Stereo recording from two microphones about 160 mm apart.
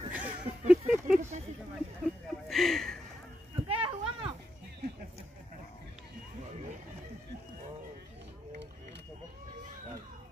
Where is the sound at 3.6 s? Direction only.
35° right (ahead or behind).